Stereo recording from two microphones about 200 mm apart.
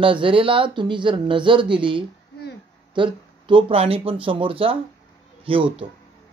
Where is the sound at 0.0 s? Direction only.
25° right (ahead or behind).